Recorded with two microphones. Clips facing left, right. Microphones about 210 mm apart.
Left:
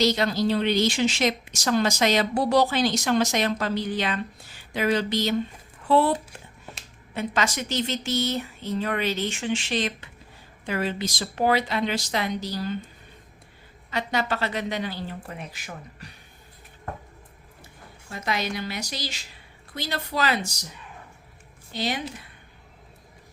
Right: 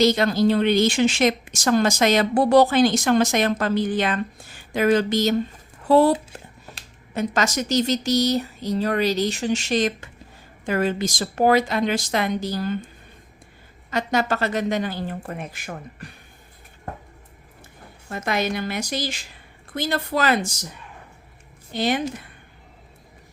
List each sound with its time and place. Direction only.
0.0 s a woman's voice: 50° right (ahead or behind)
13.9 s a woman's voice: 45° right (ahead or behind)
18.1 s a woman's voice: 50° right (ahead or behind)
21.7 s a woman's voice: 55° right (ahead or behind)